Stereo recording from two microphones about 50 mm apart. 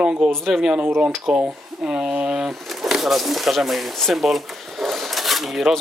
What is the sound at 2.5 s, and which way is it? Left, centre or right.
Speech, centre.